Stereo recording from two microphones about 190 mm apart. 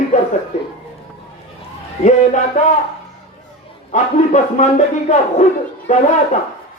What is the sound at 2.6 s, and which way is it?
Speech, 40° left (ahead or behind).